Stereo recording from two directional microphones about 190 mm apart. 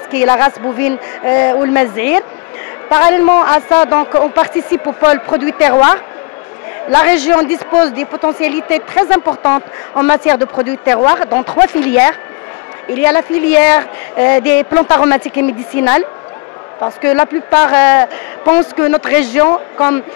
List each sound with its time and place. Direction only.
0.1 s speech: 10° left (ahead or behind)
17.0 s speech: 10° left (ahead or behind)